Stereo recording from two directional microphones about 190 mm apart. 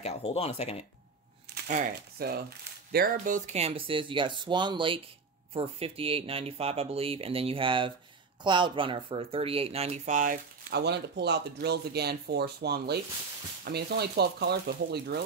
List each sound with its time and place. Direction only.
0.0 s speech: 35° left (ahead or behind)
1.7 s speech: 45° right (ahead or behind)